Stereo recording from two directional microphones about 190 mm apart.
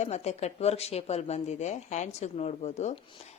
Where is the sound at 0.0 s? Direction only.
35° left (ahead or behind).